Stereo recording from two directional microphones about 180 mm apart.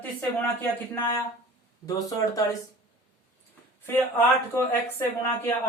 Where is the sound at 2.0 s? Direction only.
20° left (ahead or behind).